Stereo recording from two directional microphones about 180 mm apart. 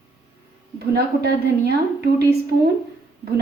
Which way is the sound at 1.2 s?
65° right (ahead or behind).